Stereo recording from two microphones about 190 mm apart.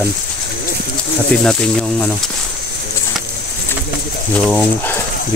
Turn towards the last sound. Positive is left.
turn(degrees=5)  # may be behind; listen again after turning